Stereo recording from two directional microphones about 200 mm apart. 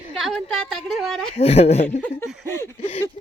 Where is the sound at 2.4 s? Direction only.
10° left (ahead or behind).